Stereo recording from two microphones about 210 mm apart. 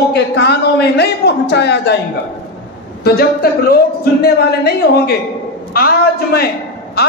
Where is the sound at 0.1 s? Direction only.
50° left (ahead or behind).